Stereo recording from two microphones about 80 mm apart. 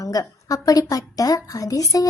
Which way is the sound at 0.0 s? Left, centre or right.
Left.